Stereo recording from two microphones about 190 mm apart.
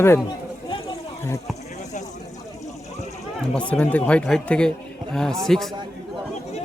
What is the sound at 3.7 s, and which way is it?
A man's voice, 5° left (ahead or behind).